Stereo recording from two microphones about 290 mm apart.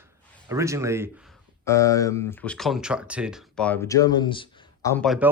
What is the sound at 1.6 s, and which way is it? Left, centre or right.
Speech, centre.